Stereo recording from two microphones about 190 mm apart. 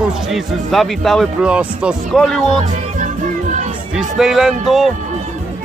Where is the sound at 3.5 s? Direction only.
35° right (ahead or behind).